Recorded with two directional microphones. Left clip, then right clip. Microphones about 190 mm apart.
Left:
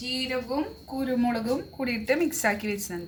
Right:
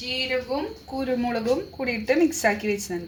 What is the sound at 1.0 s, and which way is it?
A woman's voice, 20° right (ahead or behind).